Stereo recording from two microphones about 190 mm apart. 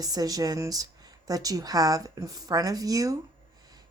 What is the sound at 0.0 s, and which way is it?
Speech, 20° right (ahead or behind).